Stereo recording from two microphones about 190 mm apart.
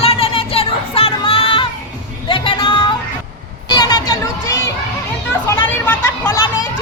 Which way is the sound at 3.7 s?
20° left (ahead or behind).